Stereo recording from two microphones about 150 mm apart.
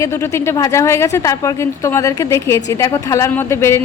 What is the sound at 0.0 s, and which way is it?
A woman's voice, 15° left (ahead or behind).